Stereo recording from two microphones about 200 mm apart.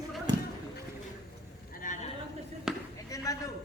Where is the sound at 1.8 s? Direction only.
40° left (ahead or behind).